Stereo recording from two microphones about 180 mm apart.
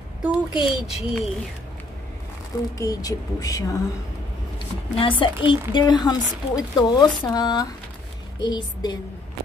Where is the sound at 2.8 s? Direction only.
20° left (ahead or behind).